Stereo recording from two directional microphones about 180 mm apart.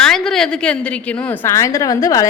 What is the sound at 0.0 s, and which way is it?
A woman's voice, 5° left (ahead or behind).